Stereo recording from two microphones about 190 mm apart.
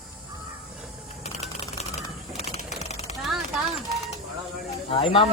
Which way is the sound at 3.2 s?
Centre (ahead or behind).